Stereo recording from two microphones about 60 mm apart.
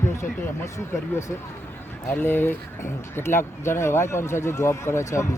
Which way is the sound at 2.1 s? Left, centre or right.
Left.